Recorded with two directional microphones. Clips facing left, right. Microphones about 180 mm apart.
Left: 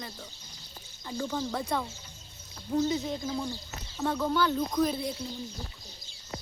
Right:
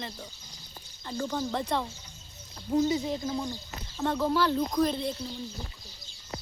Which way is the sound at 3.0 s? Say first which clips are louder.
Right 1 dB; 5° right (ahead or behind).